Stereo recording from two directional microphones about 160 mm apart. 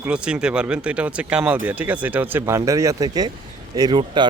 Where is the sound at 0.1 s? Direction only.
5° right (ahead or behind).